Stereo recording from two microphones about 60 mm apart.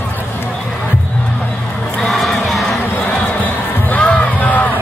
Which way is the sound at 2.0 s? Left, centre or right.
Centre.